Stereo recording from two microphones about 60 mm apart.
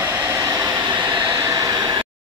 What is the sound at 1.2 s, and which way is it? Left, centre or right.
Train, right.